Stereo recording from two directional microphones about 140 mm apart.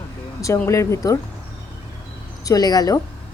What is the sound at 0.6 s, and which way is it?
Speech, 20° left (ahead or behind).